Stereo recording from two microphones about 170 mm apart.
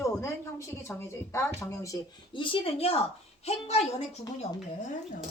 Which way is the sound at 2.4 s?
30° left (ahead or behind).